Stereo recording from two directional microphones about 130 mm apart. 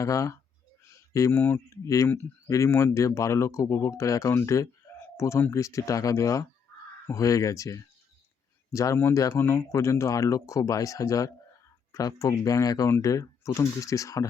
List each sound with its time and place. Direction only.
0.0 s speech: 25° left (ahead or behind)